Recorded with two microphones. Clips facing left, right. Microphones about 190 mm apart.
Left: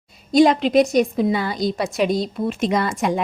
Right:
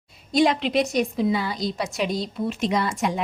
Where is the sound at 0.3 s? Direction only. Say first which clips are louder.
Left 6 dB; 40° left (ahead or behind).